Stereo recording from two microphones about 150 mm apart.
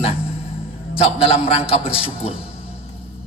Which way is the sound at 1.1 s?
45° left (ahead or behind).